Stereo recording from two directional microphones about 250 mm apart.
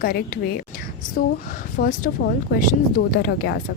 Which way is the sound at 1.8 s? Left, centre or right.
Left.